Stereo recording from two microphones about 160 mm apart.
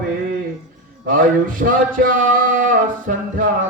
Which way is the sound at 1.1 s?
60° right (ahead or behind).